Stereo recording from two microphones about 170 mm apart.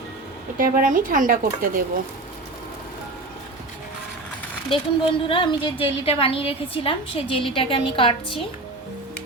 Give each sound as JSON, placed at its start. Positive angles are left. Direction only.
{"t": 0.6, "sound": "speech", "side_deg": -55}
{"t": 4.7, "sound": "a woman's voice", "side_deg": 30}